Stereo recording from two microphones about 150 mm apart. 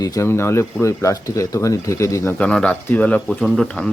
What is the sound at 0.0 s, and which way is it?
Speech, 20° left (ahead or behind).